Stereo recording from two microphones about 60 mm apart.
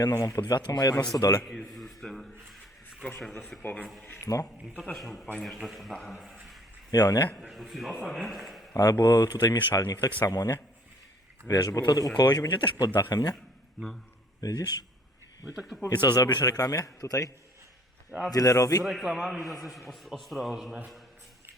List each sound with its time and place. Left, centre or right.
0.0 s speech: left
1.7 s a sound: centre
3.6 s speech: left
5.6 s speech: centre
6.9 s speech: left
7.5 s a man's voice: centre
8.7 s speech: left
11.4 s a man's voice: left
14.4 s a man's voice: left
15.7 s a man's voice: centre
16.1 s a man's voice: left
18.8 s a man's voice: centre